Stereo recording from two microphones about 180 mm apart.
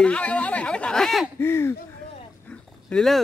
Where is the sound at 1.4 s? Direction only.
15° left (ahead or behind).